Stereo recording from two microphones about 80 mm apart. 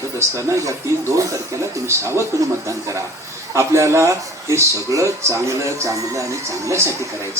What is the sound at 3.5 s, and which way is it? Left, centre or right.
Speech, right.